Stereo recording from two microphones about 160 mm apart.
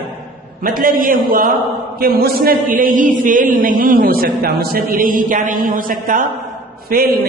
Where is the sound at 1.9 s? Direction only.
70° right (ahead or behind).